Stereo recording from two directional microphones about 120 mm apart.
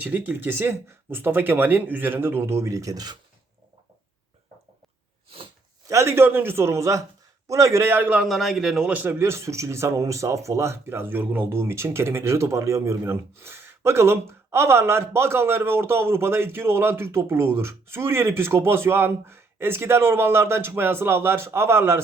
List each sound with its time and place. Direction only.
0.0 s a man's voice: 15° right (ahead or behind); by 3.2 s 30° right (ahead or behind)
5.9 s a man's voice: 25° right (ahead or behind)